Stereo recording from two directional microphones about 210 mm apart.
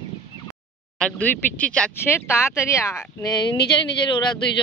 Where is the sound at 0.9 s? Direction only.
5° left (ahead or behind).